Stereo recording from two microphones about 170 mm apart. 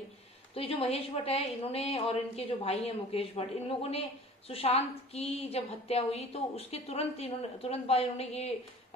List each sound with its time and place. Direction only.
0.6 s a woman's voice: 35° left (ahead or behind)
4.5 s a woman's voice: 35° left (ahead or behind)